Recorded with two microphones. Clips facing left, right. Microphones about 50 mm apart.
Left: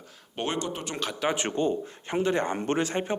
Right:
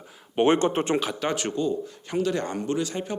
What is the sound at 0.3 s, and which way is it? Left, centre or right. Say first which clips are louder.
Speech: right 10 dB; right.